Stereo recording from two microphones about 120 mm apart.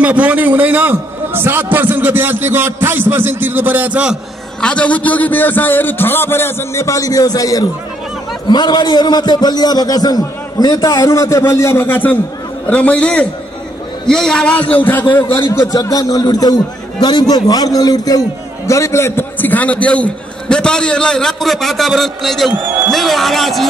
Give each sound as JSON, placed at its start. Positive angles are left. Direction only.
{"t": 0.0, "sound": "a man's voice", "side_deg": -10}
{"t": 4.6, "sound": "a man's voice", "side_deg": 10}